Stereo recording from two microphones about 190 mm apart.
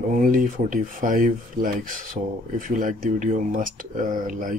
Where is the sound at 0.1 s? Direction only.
45° right (ahead or behind).